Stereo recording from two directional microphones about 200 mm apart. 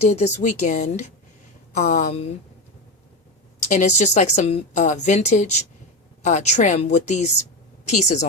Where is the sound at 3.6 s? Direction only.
35° left (ahead or behind).